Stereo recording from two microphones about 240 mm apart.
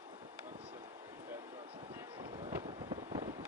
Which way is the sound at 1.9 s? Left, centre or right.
Centre.